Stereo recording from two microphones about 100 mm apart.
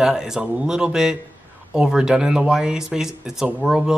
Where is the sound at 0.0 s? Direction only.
5° right (ahead or behind).